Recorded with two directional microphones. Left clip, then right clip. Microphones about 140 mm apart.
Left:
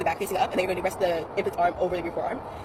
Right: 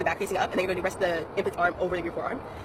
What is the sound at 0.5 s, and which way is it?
Speech, 55° right (ahead or behind).